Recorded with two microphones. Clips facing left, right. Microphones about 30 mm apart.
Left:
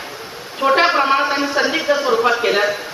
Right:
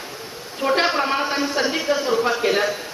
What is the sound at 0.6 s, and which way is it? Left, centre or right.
Speech, left.